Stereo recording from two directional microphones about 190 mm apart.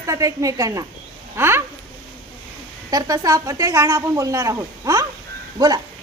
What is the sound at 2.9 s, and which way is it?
Speech, 20° right (ahead or behind).